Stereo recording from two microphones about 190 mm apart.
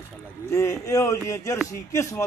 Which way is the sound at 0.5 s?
15° left (ahead or behind).